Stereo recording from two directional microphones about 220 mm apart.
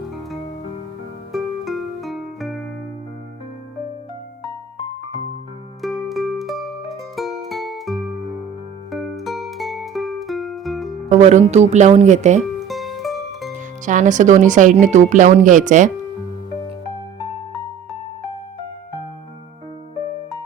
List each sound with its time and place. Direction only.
1.3 s music: centre (ahead or behind)
5.8 s music: centre (ahead or behind)
11.1 s speech: 30° right (ahead or behind)
12.6 s music: centre (ahead or behind)
13.8 s speech: 35° right (ahead or behind)